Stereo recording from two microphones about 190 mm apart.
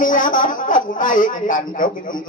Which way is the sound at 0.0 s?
45° left (ahead or behind).